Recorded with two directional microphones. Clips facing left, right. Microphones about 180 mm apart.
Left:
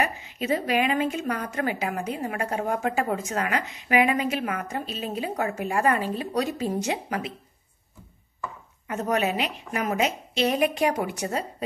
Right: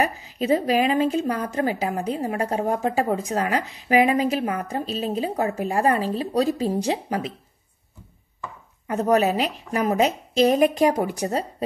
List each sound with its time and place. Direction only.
0.0 s a woman's voice: 35° right (ahead or behind)
8.8 s a woman's voice: 35° right (ahead or behind)